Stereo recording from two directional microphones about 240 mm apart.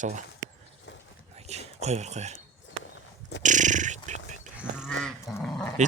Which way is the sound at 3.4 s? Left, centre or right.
Right.